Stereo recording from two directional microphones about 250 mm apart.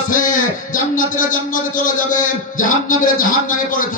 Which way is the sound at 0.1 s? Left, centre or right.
Left.